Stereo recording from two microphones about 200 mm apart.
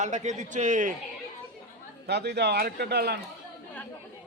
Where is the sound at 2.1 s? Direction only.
55° right (ahead or behind).